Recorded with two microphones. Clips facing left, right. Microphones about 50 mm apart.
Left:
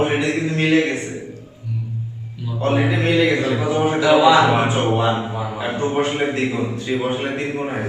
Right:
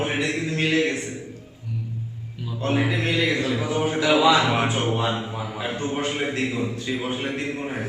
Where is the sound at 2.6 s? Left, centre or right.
Centre.